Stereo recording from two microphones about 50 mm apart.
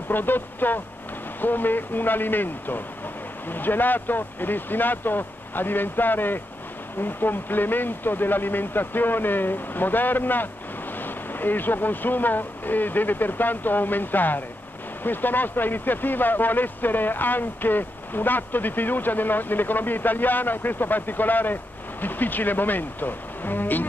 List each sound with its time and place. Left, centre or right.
0.1 s speech: left